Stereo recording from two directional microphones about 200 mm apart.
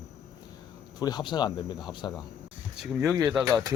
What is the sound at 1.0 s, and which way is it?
Speech, 20° left (ahead or behind).